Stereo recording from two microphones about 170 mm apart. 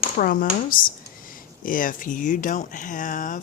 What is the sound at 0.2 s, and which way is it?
Speech, 55° left (ahead or behind).